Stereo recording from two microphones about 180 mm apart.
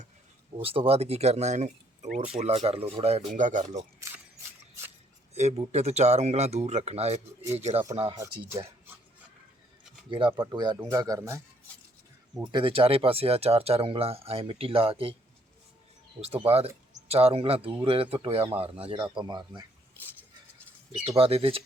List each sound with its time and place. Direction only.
0.5 s speech: 30° right (ahead or behind)
5.3 s speech: 35° right (ahead or behind)
8.1 s speech: 15° right (ahead or behind)
10.1 s speech: 30° right (ahead or behind)
12.5 s speech: 30° right (ahead or behind)
16.2 s speech: 35° right (ahead or behind)
20.9 s speech: 35° right (ahead or behind)